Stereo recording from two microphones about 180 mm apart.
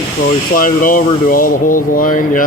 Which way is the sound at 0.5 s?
50° left (ahead or behind).